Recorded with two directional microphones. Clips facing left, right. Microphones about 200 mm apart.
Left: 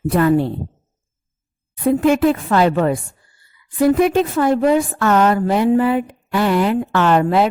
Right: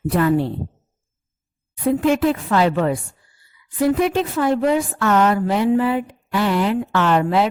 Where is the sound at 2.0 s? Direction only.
50° left (ahead or behind).